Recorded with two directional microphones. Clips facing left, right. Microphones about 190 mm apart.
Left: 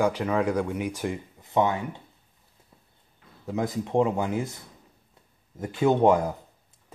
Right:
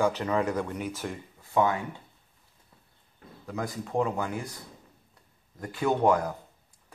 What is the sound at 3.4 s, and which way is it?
Speech, 20° left (ahead or behind).